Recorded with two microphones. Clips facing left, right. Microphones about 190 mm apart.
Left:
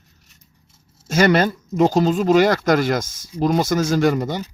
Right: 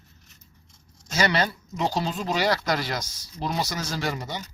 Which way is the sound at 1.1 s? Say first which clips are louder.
Left 8 dB; 50° left (ahead or behind).